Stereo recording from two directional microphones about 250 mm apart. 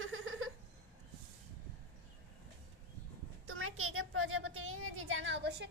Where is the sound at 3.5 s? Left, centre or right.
Right.